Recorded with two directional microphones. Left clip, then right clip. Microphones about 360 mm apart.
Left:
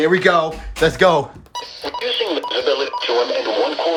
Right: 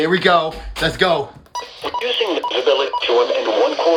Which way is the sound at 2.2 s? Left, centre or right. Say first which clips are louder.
Right 1 dB; centre.